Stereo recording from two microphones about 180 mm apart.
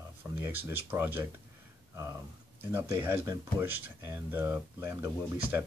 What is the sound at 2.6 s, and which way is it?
Speech, 15° right (ahead or behind).